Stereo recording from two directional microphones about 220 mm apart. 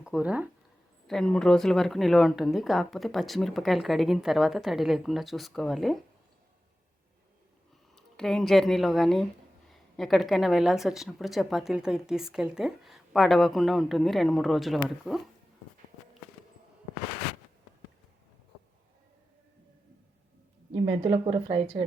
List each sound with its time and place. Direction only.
0.0 s a woman's voice: 5° right (ahead or behind)
7.9 s a woman's voice: centre (ahead or behind)
20.7 s a woman's voice: 25° right (ahead or behind)